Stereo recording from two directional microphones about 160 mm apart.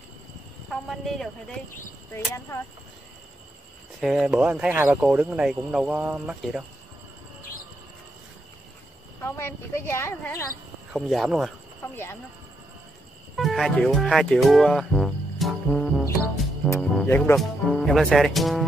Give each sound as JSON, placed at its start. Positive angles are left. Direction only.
{"t": 0.7, "sound": "speech", "side_deg": 0}
{"t": 4.0, "sound": "speech", "side_deg": -5}
{"t": 9.2, "sound": "speech", "side_deg": 15}
{"t": 10.9, "sound": "speech", "side_deg": 0}
{"t": 13.4, "sound": "speech", "side_deg": 0}
{"t": 16.9, "sound": "speech", "side_deg": 10}
{"t": 17.4, "sound": "speech", "side_deg": 0}